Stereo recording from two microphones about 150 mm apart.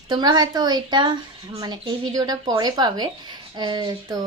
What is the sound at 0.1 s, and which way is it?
A woman's voice, 25° right (ahead or behind).